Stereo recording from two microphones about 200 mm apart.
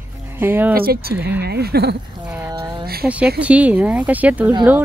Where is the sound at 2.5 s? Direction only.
20° right (ahead or behind).